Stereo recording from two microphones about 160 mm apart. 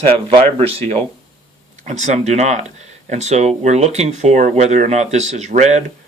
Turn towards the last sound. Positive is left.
turn(degrees=-45)  # may be behind; listen again after turning